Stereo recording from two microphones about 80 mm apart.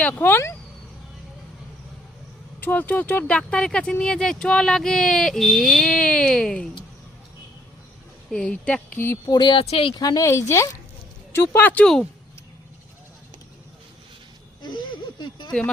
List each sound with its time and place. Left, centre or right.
0.0 s speech: left
2.6 s speech: left
8.3 s speech: centre
9.2 s speech: left
10.0 s speech: left
10.2 s speech: left
11.5 s speech: left
14.6 s a sound: left